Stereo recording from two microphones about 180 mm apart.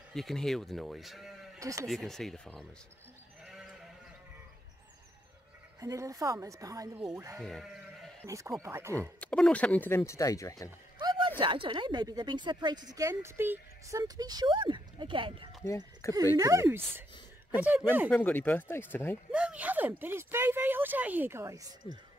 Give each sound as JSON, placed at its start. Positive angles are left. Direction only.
{"t": 0.1, "sound": "speech", "side_deg": 0}
{"t": 1.6, "sound": "speech", "side_deg": -15}
{"t": 1.9, "sound": "speech", "side_deg": 0}
{"t": 5.8, "sound": "speech", "side_deg": -20}
{"t": 7.4, "sound": "sheep", "side_deg": 0}
{"t": 8.3, "sound": "speech", "side_deg": -15}
{"t": 9.2, "sound": "speech", "side_deg": 5}
{"t": 11.0, "sound": "speech", "side_deg": -25}
{"t": 16.0, "sound": "speech", "side_deg": 15}
{"t": 16.3, "sound": "speech", "side_deg": -20}
{"t": 18.1, "sound": "speech", "side_deg": 10}
{"t": 19.3, "sound": "a sound", "side_deg": -5}
{"t": 20.0, "sound": "speech", "side_deg": -10}